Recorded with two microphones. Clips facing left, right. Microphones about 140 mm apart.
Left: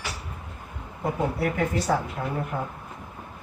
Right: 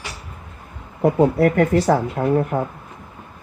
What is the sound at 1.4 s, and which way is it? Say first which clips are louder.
Speech: right 10 dB; 65° right (ahead or behind).